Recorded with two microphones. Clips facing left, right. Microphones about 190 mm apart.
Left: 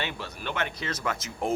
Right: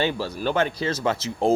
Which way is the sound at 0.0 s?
30° right (ahead or behind).